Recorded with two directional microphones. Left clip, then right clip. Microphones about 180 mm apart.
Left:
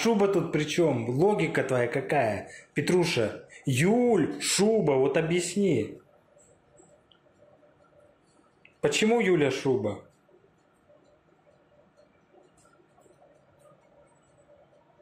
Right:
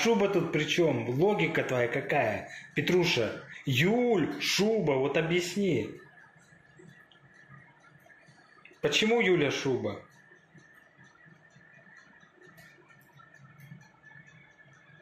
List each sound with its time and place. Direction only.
0.0 s speech: 25° left (ahead or behind)
8.8 s speech: 25° left (ahead or behind)